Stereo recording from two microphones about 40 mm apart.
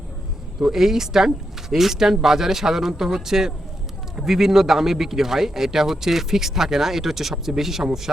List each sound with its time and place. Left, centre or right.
0.6 s speech: centre